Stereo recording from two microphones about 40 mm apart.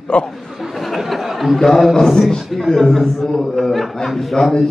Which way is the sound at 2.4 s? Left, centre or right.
Centre.